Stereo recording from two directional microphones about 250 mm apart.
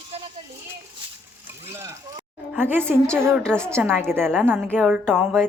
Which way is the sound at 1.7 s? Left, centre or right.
Centre.